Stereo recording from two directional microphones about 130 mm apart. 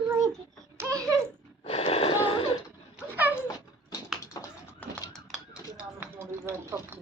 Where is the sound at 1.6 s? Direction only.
50° left (ahead or behind).